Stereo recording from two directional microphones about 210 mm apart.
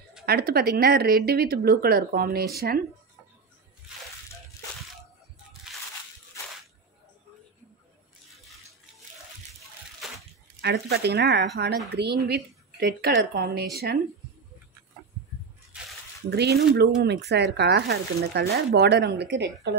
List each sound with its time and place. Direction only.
0.2 s speech: 45° right (ahead or behind)
9.6 s splash: centre (ahead or behind)
10.6 s speech: 50° right (ahead or behind)
16.3 s speech: 50° right (ahead or behind)